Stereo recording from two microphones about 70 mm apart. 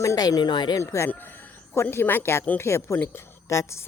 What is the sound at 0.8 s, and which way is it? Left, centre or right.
A man's voice, left.